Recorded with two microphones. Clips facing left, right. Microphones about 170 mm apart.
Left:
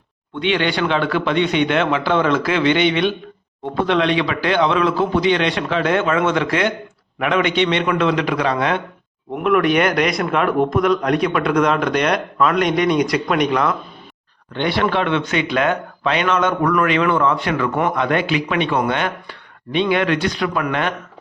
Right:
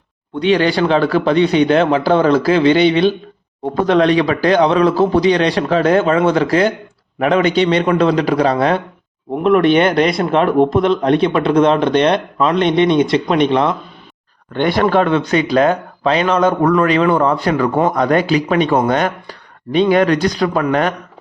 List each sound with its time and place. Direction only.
0.3 s a man's voice: 40° right (ahead or behind)
14.5 s speech: 45° right (ahead or behind)